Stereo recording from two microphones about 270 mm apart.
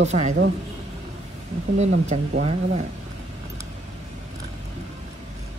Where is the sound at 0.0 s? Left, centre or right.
Right.